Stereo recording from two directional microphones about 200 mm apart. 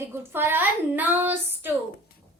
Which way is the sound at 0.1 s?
10° right (ahead or behind).